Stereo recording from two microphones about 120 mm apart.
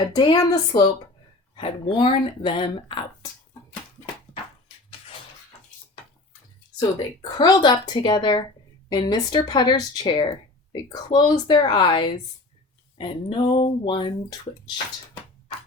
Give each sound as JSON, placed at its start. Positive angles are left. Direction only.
{"t": 0.0, "sound": "speech", "side_deg": 40}
{"t": 1.5, "sound": "speech", "side_deg": 45}
{"t": 6.7, "sound": "speech", "side_deg": 35}